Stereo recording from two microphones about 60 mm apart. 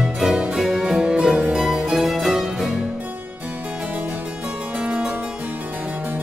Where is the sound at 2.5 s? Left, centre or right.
Centre.